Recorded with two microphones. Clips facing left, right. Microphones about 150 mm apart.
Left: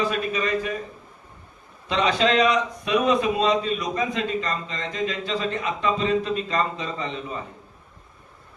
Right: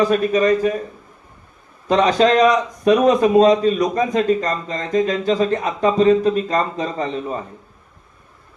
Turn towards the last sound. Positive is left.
turn(degrees=-45)  # may be behind; listen again after turning